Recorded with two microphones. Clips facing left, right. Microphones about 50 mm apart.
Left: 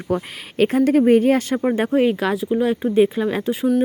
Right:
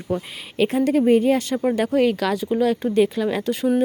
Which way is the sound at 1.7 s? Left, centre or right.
Left.